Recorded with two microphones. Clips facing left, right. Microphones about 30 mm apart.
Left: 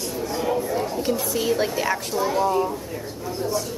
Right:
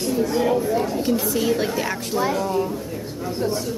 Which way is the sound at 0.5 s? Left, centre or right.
Centre.